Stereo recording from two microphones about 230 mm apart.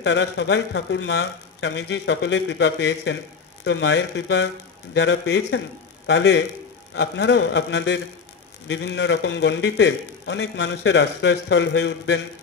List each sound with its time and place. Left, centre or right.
0.0 s a man's voice: left